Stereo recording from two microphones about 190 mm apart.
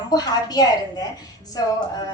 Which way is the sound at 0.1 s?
20° left (ahead or behind).